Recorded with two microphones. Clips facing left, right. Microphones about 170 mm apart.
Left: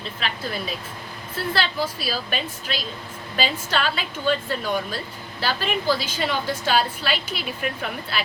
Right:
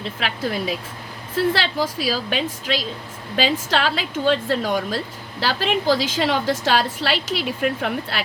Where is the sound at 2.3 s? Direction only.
90° right; by 8.2 s 70° right (ahead or behind).